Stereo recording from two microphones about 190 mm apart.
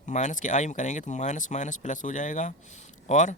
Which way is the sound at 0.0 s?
40° left (ahead or behind).